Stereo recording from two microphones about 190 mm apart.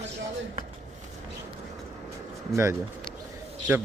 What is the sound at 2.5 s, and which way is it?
Speech, 15° right (ahead or behind).